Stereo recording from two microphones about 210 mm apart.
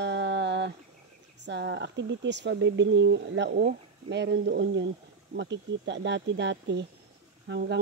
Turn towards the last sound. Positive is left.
turn(degrees=-55)  # may be behind; listen again after turning